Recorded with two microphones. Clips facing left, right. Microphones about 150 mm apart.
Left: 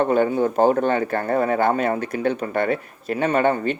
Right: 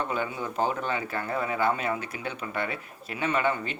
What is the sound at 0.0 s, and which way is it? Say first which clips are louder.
Speech: left 12 dB; 50° left (ahead or behind).